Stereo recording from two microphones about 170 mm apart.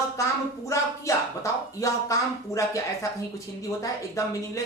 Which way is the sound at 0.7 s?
20° left (ahead or behind).